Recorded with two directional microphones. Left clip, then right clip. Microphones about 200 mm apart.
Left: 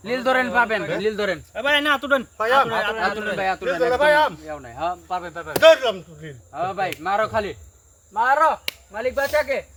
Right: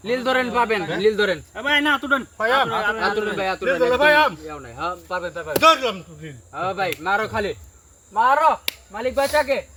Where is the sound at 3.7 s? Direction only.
20° left (ahead or behind).